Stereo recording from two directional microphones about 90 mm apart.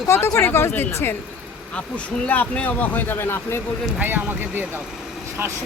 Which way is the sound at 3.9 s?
20° right (ahead or behind).